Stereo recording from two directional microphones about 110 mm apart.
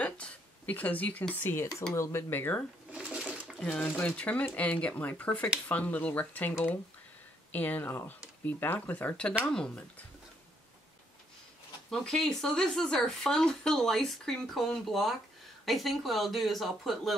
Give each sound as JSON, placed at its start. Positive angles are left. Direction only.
{"t": 0.0, "sound": "speech", "side_deg": 15}
{"t": 2.9, "sound": "sewing machine", "side_deg": -10}
{"t": 3.5, "sound": "speech", "side_deg": 5}
{"t": 7.5, "sound": "speech", "side_deg": 15}
{"t": 11.9, "sound": "speech", "side_deg": 5}